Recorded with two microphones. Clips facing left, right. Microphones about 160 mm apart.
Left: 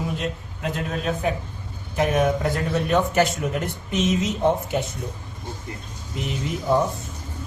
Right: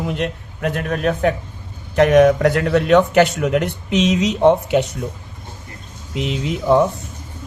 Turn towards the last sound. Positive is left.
turn(degrees=-80)